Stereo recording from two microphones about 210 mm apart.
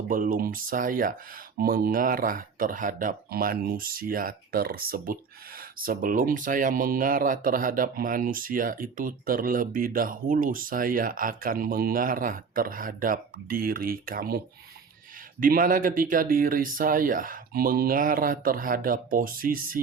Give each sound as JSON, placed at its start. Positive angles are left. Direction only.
{"t": 0.1, "sound": "speech", "side_deg": -40}